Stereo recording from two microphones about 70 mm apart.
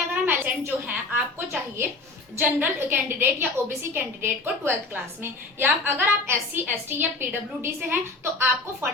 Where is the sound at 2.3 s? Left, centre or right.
Right.